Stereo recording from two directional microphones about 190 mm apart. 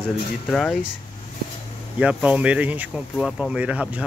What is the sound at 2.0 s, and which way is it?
Speech, 5° right (ahead or behind).